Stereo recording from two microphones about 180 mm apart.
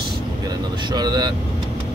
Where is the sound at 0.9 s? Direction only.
25° right (ahead or behind).